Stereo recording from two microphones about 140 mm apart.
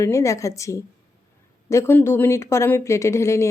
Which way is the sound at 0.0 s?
20° left (ahead or behind).